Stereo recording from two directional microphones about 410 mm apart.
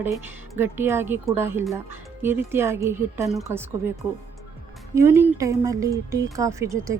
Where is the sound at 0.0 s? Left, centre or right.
Centre.